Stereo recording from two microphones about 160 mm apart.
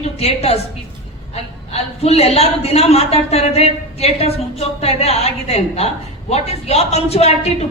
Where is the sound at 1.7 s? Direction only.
40° left (ahead or behind).